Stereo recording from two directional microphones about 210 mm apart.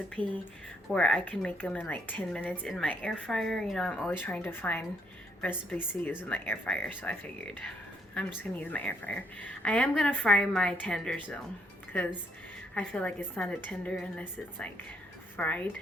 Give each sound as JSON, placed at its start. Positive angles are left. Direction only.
{"t": 0.2, "sound": "speech", "side_deg": -25}
{"t": 0.9, "sound": "a woman's voice", "side_deg": 5}
{"t": 12.7, "sound": "a woman's voice", "side_deg": 5}